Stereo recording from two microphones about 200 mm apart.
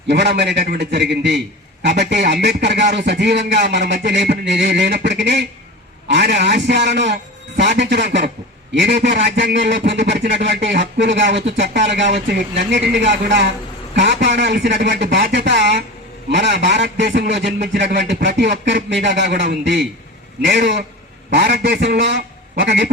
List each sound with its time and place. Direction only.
0.1 s a man's voice: 55° right (ahead or behind)